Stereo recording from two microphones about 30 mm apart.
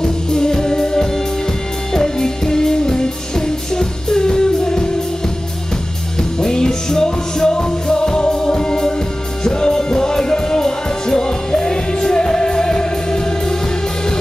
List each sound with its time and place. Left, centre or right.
0.0 s music: left
6.4 s music: centre